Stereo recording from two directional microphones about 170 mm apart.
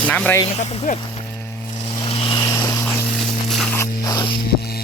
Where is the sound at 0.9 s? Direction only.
50° left (ahead or behind).